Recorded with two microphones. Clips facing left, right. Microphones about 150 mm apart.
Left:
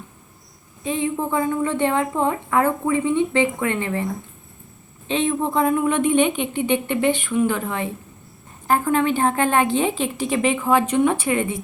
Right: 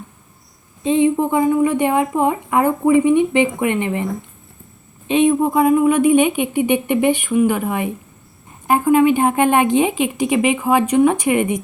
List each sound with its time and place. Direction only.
0.9 s a woman's voice: 20° right (ahead or behind)